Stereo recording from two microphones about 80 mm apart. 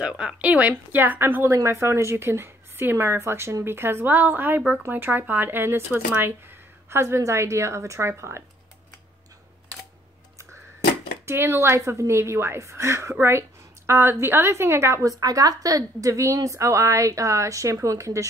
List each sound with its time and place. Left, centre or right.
0.0 s speech: centre
1.5 s a woman's voice: right
11.2 s a woman's voice: right
15.2 s a woman's voice: right